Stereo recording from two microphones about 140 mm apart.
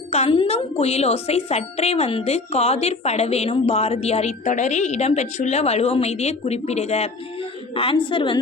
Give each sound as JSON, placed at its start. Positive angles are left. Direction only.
{"t": 0.1, "sound": "speech", "side_deg": 45}
{"t": 7.8, "sound": "a woman's voice", "side_deg": 40}